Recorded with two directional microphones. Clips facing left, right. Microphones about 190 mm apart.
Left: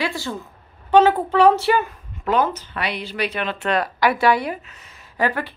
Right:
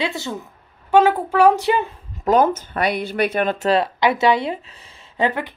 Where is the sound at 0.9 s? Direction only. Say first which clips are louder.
Even; 10° right (ahead or behind); by 2.0 s 25° right (ahead or behind).